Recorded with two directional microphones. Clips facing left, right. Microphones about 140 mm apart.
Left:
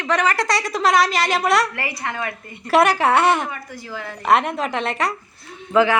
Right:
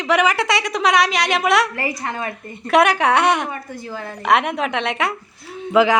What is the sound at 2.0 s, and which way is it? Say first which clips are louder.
Speech: right 1 dB; 25° right (ahead or behind).